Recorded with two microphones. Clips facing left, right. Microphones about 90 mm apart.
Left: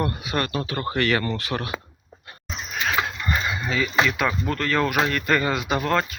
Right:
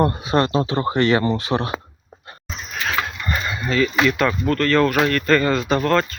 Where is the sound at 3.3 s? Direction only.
5° left (ahead or behind).